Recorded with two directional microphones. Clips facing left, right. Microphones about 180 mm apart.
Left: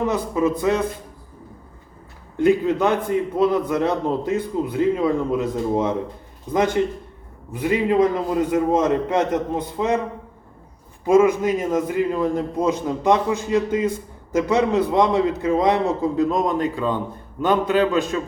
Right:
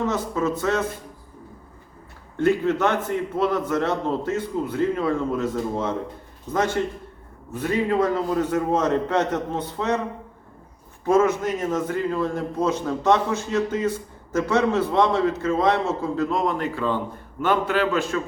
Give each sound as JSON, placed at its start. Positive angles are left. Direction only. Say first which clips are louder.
{"t": 0.0, "sound": "a man's voice", "louder": "left 3 dB", "side_deg": 15}
{"t": 2.4, "sound": "a man's voice", "louder": "left 3 dB", "side_deg": 15}
{"t": 11.0, "sound": "a man's voice", "louder": "left 4 dB", "side_deg": 10}